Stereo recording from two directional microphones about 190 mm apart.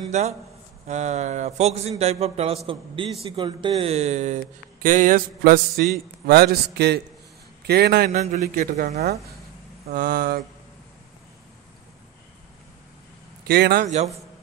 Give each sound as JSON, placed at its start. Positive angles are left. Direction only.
{"t": 0.1, "sound": "a man's voice", "side_deg": -35}
{"t": 8.1, "sound": "a man's voice", "side_deg": -40}
{"t": 9.8, "sound": "a man's voice", "side_deg": -50}
{"t": 13.5, "sound": "a man's voice", "side_deg": -60}